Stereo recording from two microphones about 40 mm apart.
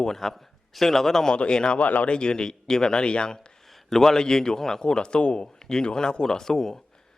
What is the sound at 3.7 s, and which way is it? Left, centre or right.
Speech, centre.